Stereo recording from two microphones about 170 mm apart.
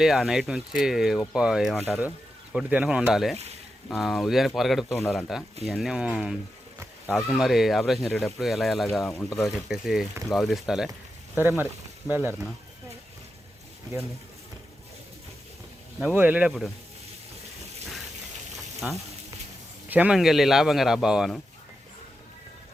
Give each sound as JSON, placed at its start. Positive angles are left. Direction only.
{"t": 0.0, "sound": "speech", "side_deg": 0}
{"t": 3.3, "sound": "speech", "side_deg": -40}
{"t": 3.8, "sound": "speech", "side_deg": 0}
{"t": 11.6, "sound": "speech", "side_deg": -15}
{"t": 16.1, "sound": "speech", "side_deg": -10}
{"t": 18.8, "sound": "speech", "side_deg": -5}